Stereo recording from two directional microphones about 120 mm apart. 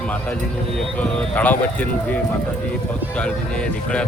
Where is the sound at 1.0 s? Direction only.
10° left (ahead or behind).